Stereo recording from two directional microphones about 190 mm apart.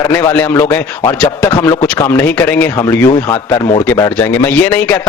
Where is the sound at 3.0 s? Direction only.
25° left (ahead or behind).